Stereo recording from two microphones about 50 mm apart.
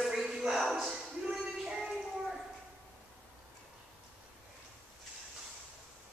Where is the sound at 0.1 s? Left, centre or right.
Centre.